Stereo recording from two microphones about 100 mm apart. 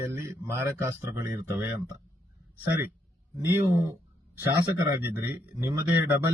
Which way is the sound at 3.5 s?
30° right (ahead or behind).